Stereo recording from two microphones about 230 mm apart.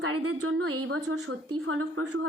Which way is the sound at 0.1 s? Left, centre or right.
Right.